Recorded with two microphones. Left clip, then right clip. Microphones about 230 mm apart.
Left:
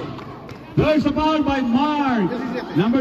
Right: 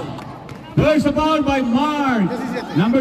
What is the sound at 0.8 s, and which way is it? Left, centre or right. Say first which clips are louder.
A man's voice: right 2 dB; right.